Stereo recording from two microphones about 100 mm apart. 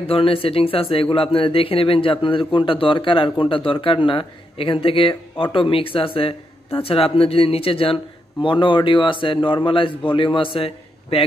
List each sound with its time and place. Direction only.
0.0 s speech: 70° left (ahead or behind)